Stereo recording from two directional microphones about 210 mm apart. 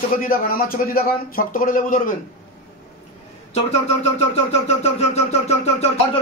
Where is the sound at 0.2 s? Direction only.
45° left (ahead or behind).